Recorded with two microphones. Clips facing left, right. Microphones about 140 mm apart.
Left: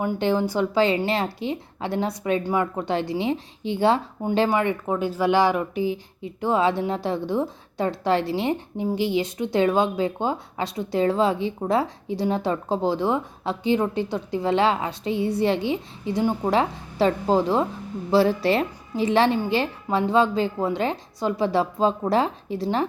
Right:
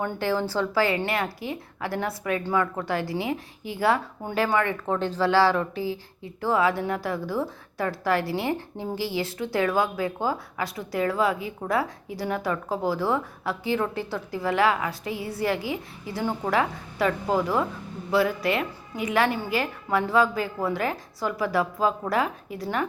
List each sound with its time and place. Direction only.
0.2 s a woman's voice: 20° left (ahead or behind)